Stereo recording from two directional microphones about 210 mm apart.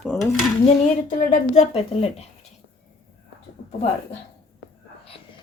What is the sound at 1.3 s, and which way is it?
Speech, 30° left (ahead or behind).